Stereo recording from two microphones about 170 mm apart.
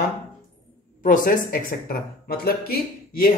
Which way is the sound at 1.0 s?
50° left (ahead or behind).